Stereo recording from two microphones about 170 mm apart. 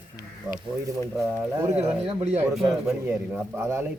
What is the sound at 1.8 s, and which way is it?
Speech, 40° right (ahead or behind).